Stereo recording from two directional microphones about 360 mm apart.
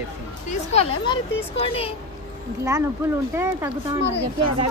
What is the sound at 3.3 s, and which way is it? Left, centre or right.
Speech, centre.